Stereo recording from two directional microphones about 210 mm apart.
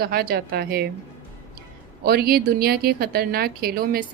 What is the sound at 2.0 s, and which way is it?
A woman's voice, 50° right (ahead or behind).